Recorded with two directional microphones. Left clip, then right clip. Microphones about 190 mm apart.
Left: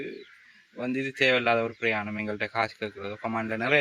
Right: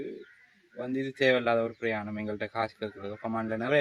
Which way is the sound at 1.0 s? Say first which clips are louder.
Left 2 dB; 15° left (ahead or behind).